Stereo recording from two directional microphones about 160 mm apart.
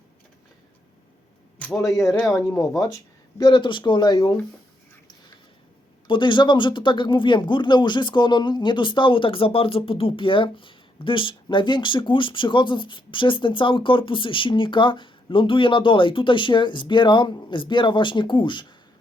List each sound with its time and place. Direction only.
1.5 s a man's voice: 5° left (ahead or behind)
2.3 s speech: 20° left (ahead or behind)
6.1 s speech: 30° left (ahead or behind)